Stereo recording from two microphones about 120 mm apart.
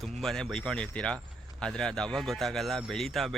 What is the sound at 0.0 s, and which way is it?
Speech, 5° left (ahead or behind).